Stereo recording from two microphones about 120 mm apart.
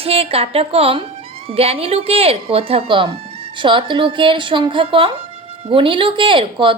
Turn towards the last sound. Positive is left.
turn(degrees=-45)  # may be behind; listen again after turning